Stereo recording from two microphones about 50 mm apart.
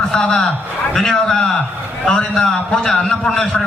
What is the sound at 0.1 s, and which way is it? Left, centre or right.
A man's voice, centre.